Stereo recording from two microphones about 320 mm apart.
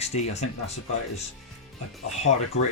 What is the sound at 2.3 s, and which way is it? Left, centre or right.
Speech, left.